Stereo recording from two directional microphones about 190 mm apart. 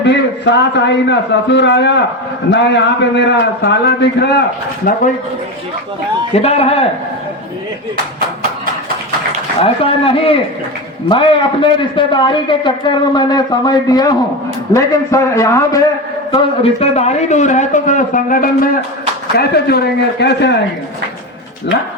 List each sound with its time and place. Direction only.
0.0 s a man's voice: 65° left (ahead or behind)
6.4 s a man's voice: 35° left (ahead or behind)
9.6 s a man's voice: 30° left (ahead or behind)
16.8 s a man's voice: 35° left (ahead or behind)
19.4 s a man's voice: 55° left (ahead or behind)